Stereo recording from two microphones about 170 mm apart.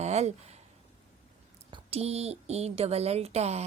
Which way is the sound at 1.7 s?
35° right (ahead or behind).